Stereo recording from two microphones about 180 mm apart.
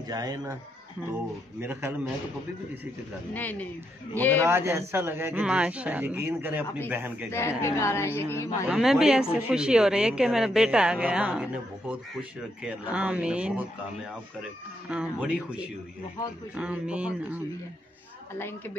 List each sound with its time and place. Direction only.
0.1 s speech: 20° right (ahead or behind)
1.6 s a man's voice: 10° right (ahead or behind)
3.3 s speech: 10° left (ahead or behind)
4.4 s a man's voice: 15° right (ahead or behind)
7.2 s speech: 15° left (ahead or behind)
8.6 s speech: centre (ahead or behind)
14.9 s a man's voice: 5° right (ahead or behind)